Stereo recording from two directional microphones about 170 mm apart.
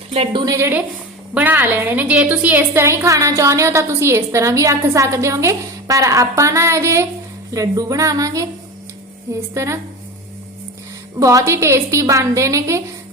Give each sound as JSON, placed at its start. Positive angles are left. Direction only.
{"t": 0.1, "sound": "a woman's voice", "side_deg": -35}
{"t": 0.4, "sound": "a woman's voice", "side_deg": -15}
{"t": 11.2, "sound": "a woman's voice", "side_deg": -20}